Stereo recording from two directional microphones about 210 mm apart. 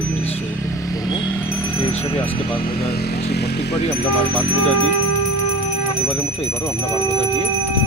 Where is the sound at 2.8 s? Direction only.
50° left (ahead or behind).